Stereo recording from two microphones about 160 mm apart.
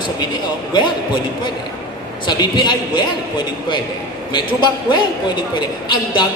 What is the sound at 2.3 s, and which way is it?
A man's voice, 25° left (ahead or behind).